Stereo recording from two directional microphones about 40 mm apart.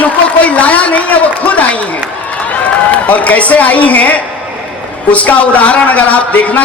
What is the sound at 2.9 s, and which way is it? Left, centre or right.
A man's voice, left.